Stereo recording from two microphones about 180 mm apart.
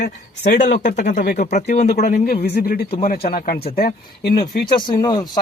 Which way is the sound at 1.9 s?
60° left (ahead or behind).